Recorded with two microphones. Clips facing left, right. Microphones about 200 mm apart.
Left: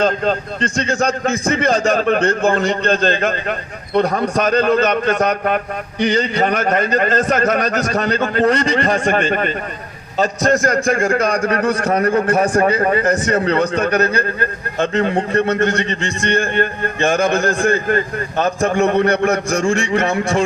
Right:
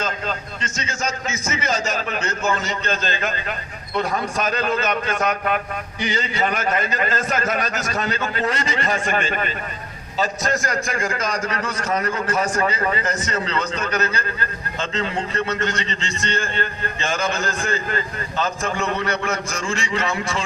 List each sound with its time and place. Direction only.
0.6 s a man's voice: 60° left (ahead or behind)